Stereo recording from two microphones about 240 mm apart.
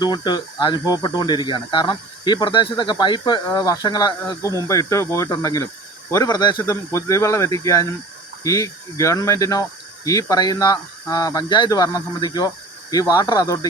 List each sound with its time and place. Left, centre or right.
0.0 s speech: centre